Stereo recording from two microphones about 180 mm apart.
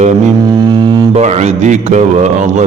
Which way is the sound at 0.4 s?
25° right (ahead or behind).